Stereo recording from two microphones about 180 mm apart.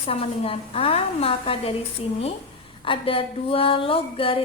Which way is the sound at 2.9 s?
30° left (ahead or behind).